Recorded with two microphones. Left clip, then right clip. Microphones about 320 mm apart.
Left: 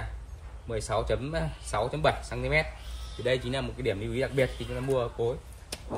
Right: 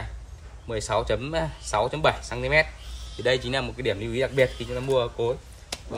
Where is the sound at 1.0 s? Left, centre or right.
Centre.